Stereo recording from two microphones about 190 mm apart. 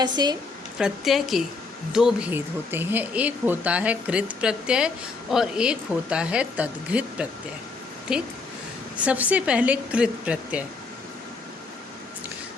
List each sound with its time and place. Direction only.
0.0 s speech: 20° right (ahead or behind)
0.8 s speech: centre (ahead or behind)